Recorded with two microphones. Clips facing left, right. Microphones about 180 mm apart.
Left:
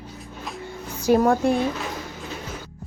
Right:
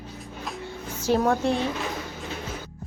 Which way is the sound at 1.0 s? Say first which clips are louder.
Left 4 dB; 10° left (ahead or behind).